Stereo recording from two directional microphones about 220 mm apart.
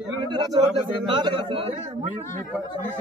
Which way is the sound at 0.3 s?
15° right (ahead or behind).